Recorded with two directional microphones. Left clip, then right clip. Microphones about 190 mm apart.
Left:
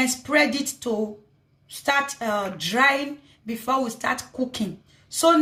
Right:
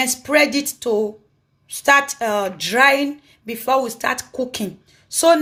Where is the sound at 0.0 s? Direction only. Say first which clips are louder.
Right 4 dB; 45° right (ahead or behind).